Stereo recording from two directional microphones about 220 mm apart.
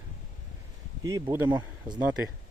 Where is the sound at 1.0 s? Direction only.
15° right (ahead or behind).